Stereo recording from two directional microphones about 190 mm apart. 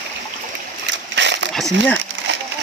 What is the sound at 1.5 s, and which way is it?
Speech, centre (ahead or behind).